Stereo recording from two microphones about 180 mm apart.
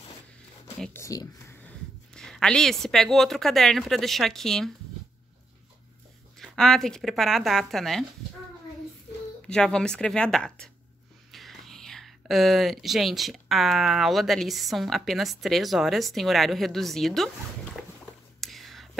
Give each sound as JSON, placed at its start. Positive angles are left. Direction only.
{"t": 0.9, "sound": "a sound", "side_deg": 20}
{"t": 2.1, "sound": "speech", "side_deg": 5}
{"t": 6.4, "sound": "speech", "side_deg": 5}
{"t": 9.5, "sound": "speech", "side_deg": 5}
{"t": 18.4, "sound": "whispering", "side_deg": 0}